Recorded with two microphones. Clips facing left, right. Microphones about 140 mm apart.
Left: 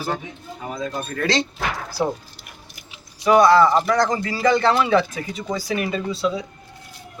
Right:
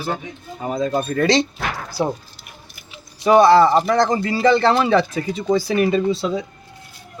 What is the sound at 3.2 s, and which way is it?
A man's voice, 25° right (ahead or behind).